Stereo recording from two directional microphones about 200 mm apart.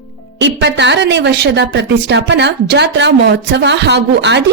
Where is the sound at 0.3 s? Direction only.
60° right (ahead or behind).